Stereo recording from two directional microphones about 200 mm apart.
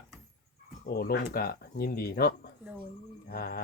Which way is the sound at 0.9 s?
50° left (ahead or behind).